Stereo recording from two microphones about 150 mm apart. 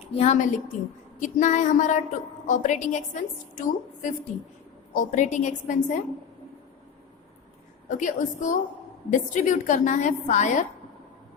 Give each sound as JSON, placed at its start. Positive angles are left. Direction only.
{"t": 0.2, "sound": "a woman's voice", "side_deg": 50}
{"t": 7.9, "sound": "a woman's voice", "side_deg": 55}